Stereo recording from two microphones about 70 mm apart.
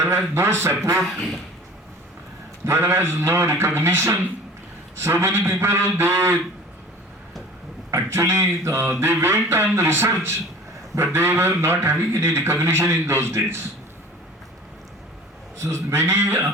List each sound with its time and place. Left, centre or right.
0.0 s a man's voice: right
1.0 s speech: centre
2.6 s a man's voice: right
7.9 s a man's voice: right
15.5 s a man's voice: right